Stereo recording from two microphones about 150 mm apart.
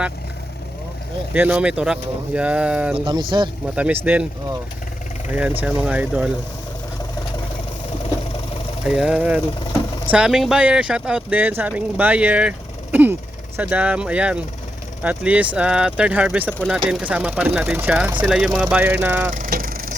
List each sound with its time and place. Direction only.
1.3 s speech: 10° right (ahead or behind)
3.0 s speech: 30° right (ahead or behind)
3.8 s speech: 10° right (ahead or behind)
5.3 s speech: 10° right (ahead or behind)
8.9 s speech: 5° right (ahead or behind)
19.3 s vehicle: 65° right (ahead or behind)